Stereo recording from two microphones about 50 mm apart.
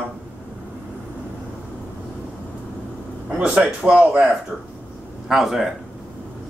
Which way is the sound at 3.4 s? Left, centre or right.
Centre.